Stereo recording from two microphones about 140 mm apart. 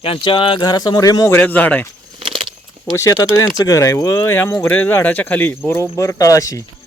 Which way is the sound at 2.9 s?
20° left (ahead or behind).